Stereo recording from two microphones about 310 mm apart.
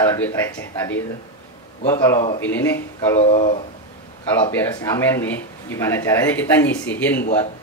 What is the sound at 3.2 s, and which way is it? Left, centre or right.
Speech, centre.